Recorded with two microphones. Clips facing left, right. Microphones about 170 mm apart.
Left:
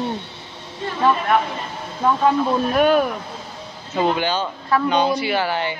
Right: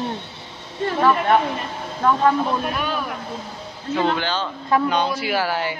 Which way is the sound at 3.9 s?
15° left (ahead or behind).